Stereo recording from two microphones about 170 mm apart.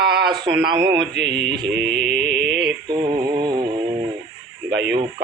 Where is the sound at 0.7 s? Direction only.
25° right (ahead or behind).